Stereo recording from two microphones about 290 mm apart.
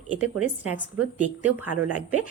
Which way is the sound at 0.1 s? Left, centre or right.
Right.